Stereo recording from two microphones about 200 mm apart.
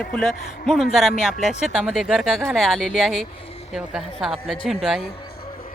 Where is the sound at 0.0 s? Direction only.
5° left (ahead or behind).